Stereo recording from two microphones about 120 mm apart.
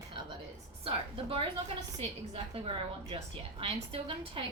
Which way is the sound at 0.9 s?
50° right (ahead or behind).